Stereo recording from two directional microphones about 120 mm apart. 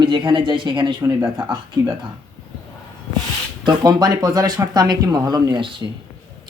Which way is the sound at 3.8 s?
35° right (ahead or behind).